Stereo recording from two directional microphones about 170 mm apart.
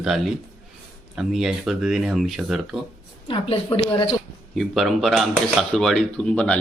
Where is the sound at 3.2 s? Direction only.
30° left (ahead or behind).